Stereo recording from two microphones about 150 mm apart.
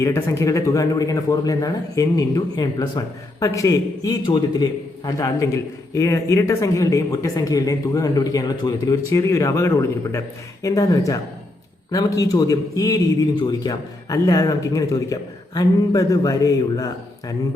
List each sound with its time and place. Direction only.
0.0 s a man's voice: 20° left (ahead or behind)